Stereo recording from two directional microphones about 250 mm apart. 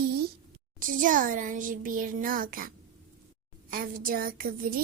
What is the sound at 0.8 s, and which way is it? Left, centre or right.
A woman's voice, right.